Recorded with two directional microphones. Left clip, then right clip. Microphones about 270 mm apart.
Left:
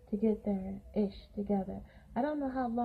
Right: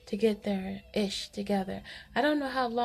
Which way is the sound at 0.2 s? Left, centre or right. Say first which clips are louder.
Right 5 dB; right.